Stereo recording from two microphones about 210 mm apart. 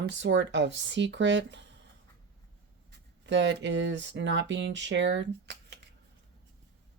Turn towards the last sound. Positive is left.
turn(degrees=-55)  # may be behind; listen again after turning